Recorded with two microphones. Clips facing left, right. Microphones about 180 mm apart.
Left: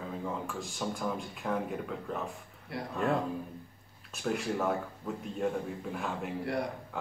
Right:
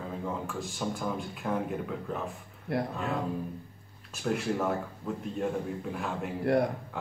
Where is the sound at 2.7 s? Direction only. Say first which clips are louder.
Right 8 dB; 60° right (ahead or behind).